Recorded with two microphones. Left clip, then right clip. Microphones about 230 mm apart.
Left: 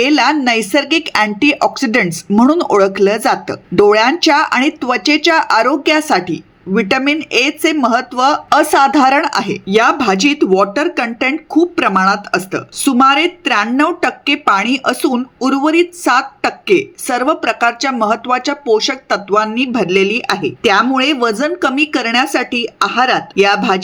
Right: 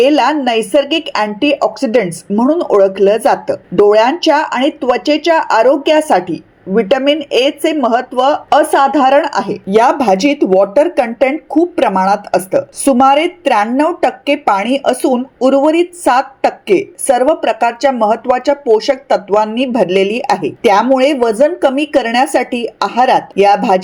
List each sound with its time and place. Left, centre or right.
0.0 s speech: centre